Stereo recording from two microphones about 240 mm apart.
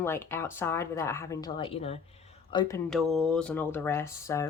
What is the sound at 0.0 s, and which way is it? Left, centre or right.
Speech, centre.